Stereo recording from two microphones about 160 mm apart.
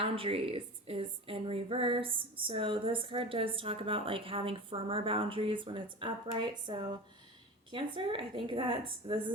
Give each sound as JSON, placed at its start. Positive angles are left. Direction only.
{"t": 0.0, "sound": "speech", "side_deg": -35}